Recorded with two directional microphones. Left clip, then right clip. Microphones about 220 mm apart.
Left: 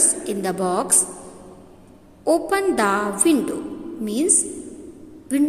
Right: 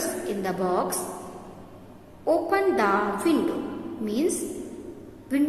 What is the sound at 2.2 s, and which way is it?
A woman's voice, 45° left (ahead or behind).